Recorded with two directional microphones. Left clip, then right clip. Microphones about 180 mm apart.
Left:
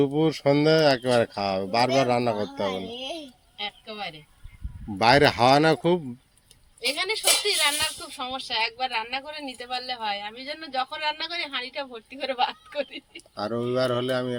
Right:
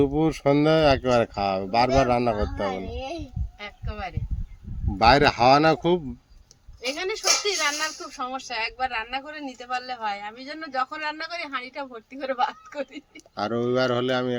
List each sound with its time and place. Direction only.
0.0 s speech: 5° right (ahead or behind)
3.6 s a sound: 15° right (ahead or behind)
4.9 s speech: centre (ahead or behind)
6.9 s speech: 15° right (ahead or behind)
7.4 s speech: 5° right (ahead or behind)